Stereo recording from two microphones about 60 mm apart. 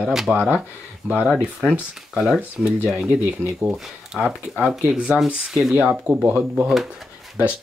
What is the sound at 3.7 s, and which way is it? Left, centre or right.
Speech, centre.